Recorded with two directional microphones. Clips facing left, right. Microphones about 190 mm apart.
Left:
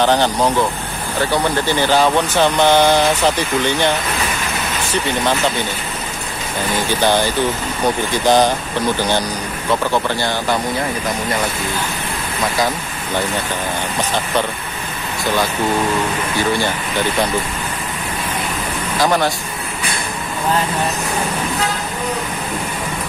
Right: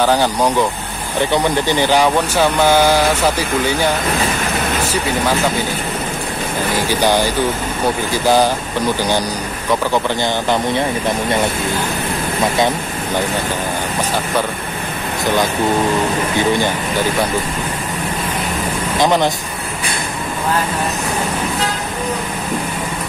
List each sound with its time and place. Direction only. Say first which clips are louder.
0.0 s speech: even; 10° right (ahead or behind)
6.9 s speech: right 1 dB; 10° right (ahead or behind)
8.3 s speech: even; 10° right (ahead or behind)
12.5 s speech: right 3 dB; 25° right (ahead or behind)
16.3 s speech: right 2 dB; 15° right (ahead or behind)
18.9 s speech: right 2 dB; 20° right (ahead or behind)